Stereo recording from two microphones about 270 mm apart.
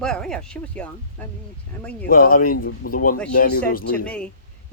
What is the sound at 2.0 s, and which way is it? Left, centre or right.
Speech, left.